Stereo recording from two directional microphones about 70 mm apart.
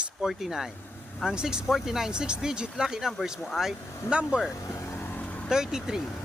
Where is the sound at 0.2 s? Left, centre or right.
Centre.